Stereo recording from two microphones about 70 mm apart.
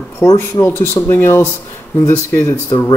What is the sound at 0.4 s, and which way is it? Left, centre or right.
Speech, left.